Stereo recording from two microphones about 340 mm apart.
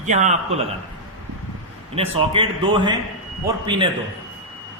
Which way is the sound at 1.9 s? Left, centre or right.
Centre.